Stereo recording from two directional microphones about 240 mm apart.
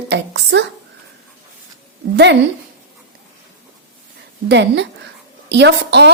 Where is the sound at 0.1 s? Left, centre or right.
Right.